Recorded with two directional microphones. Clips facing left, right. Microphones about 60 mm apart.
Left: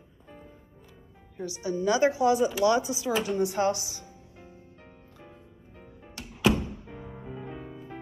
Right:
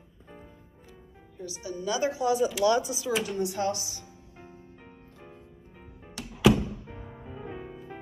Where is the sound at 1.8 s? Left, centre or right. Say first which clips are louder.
Left 5 dB; left.